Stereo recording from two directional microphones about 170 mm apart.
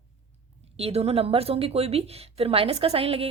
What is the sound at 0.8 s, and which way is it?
Speech, 35° right (ahead or behind).